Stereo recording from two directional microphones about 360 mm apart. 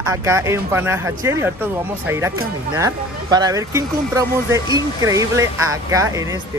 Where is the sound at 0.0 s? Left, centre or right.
Centre.